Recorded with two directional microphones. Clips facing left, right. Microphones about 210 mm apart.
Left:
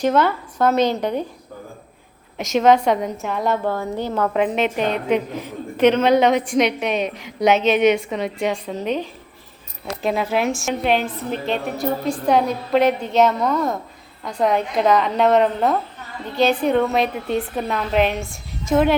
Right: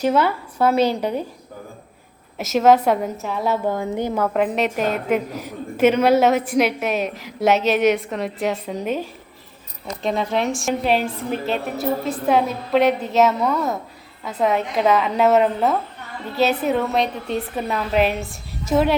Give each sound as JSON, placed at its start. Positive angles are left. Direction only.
{"t": 0.0, "sound": "a woman's voice", "side_deg": -10}
{"t": 2.4, "sound": "a woman's voice", "side_deg": -5}
{"t": 3.7, "sound": "a woman's voice", "side_deg": -15}
{"t": 4.1, "sound": "a woman's voice", "side_deg": -5}
{"t": 10.0, "sound": "a woman's voice", "side_deg": 5}